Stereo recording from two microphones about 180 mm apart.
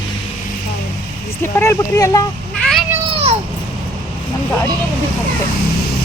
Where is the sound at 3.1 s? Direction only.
35° right (ahead or behind).